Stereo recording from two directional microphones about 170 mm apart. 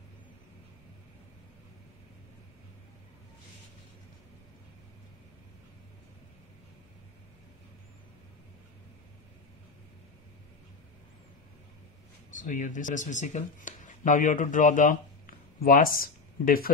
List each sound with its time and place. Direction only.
12.4 s speech: 50° left (ahead or behind)